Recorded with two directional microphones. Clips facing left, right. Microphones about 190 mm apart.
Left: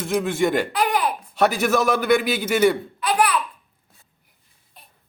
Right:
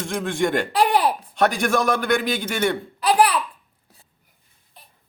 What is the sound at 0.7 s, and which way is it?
Speech, 30° right (ahead or behind).